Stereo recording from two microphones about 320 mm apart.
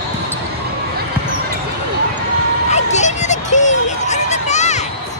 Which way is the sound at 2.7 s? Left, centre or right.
Left.